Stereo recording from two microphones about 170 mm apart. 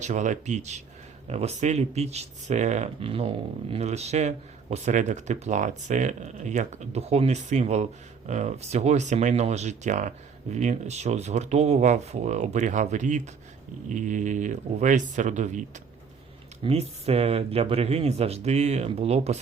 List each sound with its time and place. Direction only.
0.0 s speech: 45° right (ahead or behind)
16.6 s speech: 35° right (ahead or behind)